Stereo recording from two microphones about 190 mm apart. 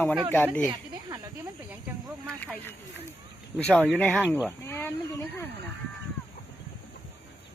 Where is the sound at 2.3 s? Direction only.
5° left (ahead or behind).